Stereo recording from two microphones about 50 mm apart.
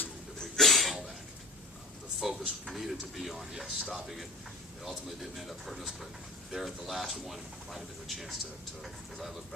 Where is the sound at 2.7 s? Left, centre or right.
Centre.